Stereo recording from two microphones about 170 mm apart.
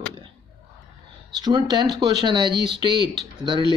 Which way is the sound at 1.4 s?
25° right (ahead or behind).